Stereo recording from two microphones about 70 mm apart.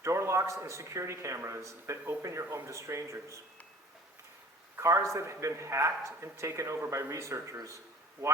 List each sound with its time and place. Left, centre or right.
0.0 s a sound: right
0.6 s a man's voice: right
4.8 s a man's voice: right